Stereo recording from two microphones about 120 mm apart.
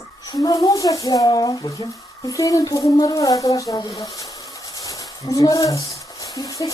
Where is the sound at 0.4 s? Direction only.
30° left (ahead or behind).